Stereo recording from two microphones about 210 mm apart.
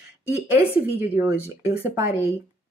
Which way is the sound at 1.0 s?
10° right (ahead or behind).